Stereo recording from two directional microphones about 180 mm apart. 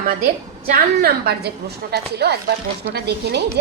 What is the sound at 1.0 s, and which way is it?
A woman's voice, 60° right (ahead or behind).